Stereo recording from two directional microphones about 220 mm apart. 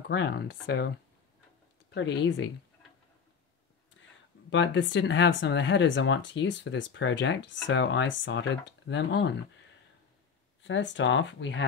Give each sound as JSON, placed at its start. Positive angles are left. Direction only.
{"t": 0.1, "sound": "speech", "side_deg": 50}
{"t": 2.0, "sound": "speech", "side_deg": 55}
{"t": 4.5, "sound": "speech", "side_deg": 55}
{"t": 10.6, "sound": "speech", "side_deg": 55}